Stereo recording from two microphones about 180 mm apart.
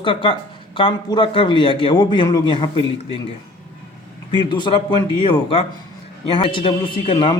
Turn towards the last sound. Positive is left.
turn(degrees=30)  # may be behind; listen again after turning